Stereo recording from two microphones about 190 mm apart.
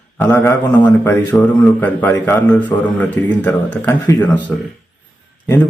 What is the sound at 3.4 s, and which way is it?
Speech, 10° left (ahead or behind).